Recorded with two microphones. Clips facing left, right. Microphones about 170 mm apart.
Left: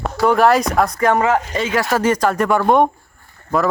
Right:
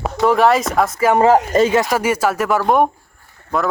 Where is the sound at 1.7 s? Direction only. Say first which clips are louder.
Right 1 dB; 15° right (ahead or behind).